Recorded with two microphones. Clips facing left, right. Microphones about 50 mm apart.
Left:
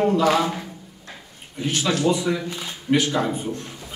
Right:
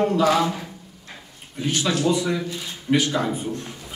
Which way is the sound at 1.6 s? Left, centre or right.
Centre.